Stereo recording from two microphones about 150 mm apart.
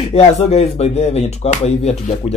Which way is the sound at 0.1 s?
45° left (ahead or behind).